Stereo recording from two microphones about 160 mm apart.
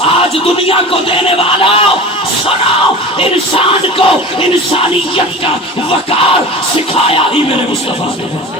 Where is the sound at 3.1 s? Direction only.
35° left (ahead or behind).